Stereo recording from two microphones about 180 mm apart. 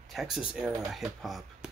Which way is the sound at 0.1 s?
Centre (ahead or behind).